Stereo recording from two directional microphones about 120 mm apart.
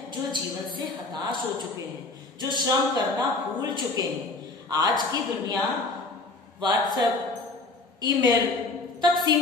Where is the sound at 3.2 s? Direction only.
40° right (ahead or behind).